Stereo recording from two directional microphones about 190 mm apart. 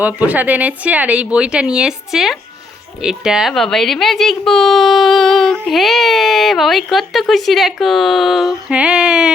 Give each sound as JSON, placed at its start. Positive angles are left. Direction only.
{"t": 0.0, "sound": "speech", "side_deg": -10}